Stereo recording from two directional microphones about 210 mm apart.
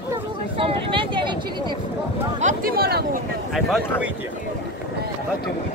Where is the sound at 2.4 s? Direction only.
45° right (ahead or behind).